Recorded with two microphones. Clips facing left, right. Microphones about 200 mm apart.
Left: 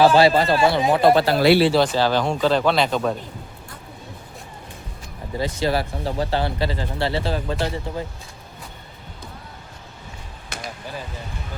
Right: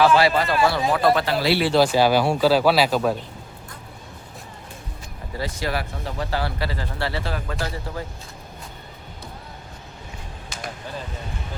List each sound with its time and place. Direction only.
0.0 s speech: 30° left (ahead or behind)
1.7 s speech: 10° right (ahead or behind)
5.4 s speech: 25° left (ahead or behind)
10.5 s a sound: 65° left (ahead or behind)